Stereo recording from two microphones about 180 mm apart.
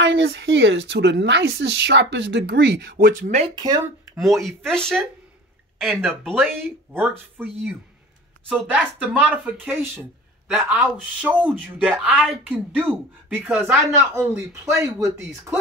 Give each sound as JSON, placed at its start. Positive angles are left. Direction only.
{"t": 0.0, "sound": "a woman's voice", "side_deg": -90}
{"t": 3.5, "sound": "speech", "side_deg": -20}
{"t": 4.2, "sound": "speech", "side_deg": 0}
{"t": 6.9, "sound": "speech", "side_deg": -10}